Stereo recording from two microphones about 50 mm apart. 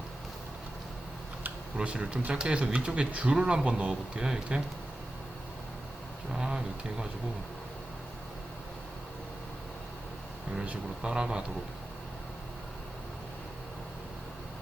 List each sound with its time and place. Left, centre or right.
1.7 s speech: centre
6.3 s a sound: centre
10.5 s speech: centre